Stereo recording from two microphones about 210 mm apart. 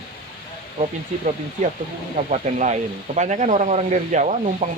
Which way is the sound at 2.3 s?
35° right (ahead or behind).